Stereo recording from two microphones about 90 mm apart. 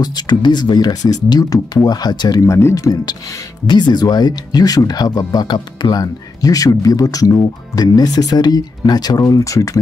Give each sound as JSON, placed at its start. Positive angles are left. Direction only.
{"t": 0.0, "sound": "speech", "side_deg": 50}
{"t": 3.6, "sound": "speech", "side_deg": 55}